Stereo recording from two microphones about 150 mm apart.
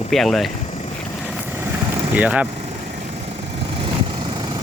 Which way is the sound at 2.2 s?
10° right (ahead or behind).